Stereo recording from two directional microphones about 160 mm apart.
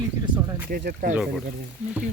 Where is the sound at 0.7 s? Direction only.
70° right (ahead or behind).